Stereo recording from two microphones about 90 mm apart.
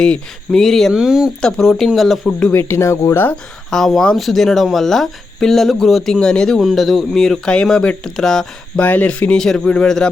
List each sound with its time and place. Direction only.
0.0 s speech: 5° left (ahead or behind)
1.4 s speech: 5° left (ahead or behind)
2.5 s speech: 25° left (ahead or behind)
3.7 s speech: 5° left (ahead or behind)
8.8 s speech: 15° left (ahead or behind)